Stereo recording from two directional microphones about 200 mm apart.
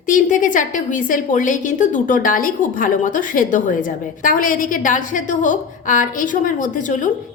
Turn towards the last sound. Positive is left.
turn(degrees=40)  # may be behind; listen again after turning